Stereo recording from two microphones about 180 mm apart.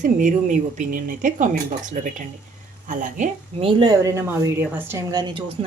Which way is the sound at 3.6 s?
20° right (ahead or behind).